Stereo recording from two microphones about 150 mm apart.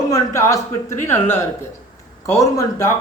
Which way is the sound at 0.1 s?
20° left (ahead or behind).